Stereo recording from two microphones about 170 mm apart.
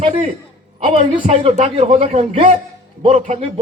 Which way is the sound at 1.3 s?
40° right (ahead or behind).